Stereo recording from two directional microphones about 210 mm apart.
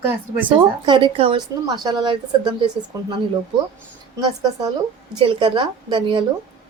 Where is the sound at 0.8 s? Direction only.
25° right (ahead or behind).